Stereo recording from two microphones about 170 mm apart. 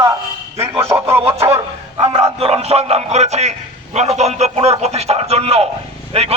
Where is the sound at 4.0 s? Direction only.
40° right (ahead or behind).